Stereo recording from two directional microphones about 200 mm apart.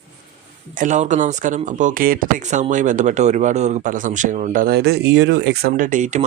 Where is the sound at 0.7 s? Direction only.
40° right (ahead or behind).